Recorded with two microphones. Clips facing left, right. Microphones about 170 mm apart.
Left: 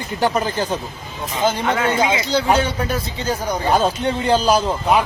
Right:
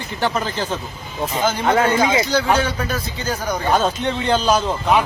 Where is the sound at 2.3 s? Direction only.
25° left (ahead or behind).